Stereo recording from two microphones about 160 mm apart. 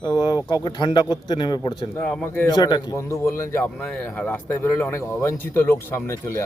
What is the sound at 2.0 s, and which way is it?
Speech, 10° left (ahead or behind).